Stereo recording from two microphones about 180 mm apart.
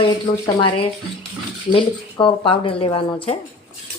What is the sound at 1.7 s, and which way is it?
A woman's voice, 30° left (ahead or behind).